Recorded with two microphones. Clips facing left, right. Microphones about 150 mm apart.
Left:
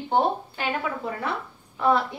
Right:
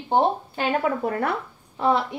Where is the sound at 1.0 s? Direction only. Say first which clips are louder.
Right 5 dB; 55° right (ahead or behind).